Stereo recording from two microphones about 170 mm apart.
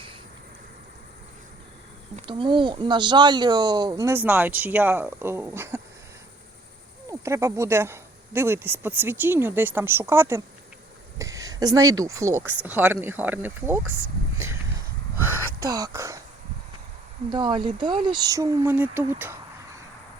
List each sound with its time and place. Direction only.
2.2 s speech: 30° right (ahead or behind)
7.1 s speech: 15° right (ahead or behind)
14.3 s a sound: 15° right (ahead or behind)
17.3 s speech: 25° right (ahead or behind)